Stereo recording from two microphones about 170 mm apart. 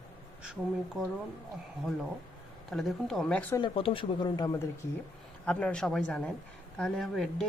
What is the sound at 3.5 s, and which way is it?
Speech, 30° left (ahead or behind).